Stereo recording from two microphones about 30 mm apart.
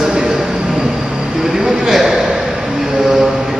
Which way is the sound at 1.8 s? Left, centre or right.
Centre.